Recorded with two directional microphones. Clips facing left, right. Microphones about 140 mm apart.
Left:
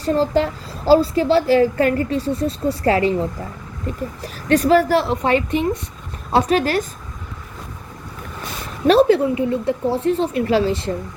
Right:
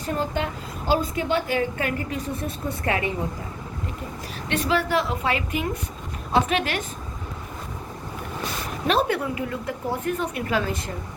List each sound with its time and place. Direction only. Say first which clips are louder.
0.0 s a woman's voice: left 9 dB; 35° left (ahead or behind)
8.9 s a woman's voice: left 10 dB; 30° left (ahead or behind)